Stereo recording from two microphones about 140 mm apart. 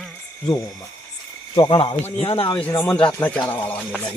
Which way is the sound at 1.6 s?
40° left (ahead or behind).